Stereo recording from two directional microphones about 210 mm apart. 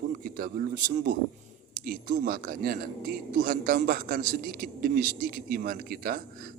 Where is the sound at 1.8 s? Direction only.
40° right (ahead or behind).